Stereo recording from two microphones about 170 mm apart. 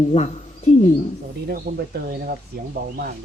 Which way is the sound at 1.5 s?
65° right (ahead or behind).